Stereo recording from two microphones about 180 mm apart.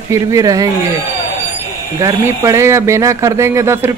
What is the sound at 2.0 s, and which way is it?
Speech, 15° right (ahead or behind).